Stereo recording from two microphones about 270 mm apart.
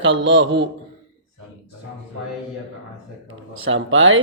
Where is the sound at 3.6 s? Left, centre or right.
Right.